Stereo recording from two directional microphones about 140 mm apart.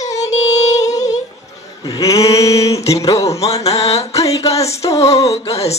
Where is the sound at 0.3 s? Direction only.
55° left (ahead or behind).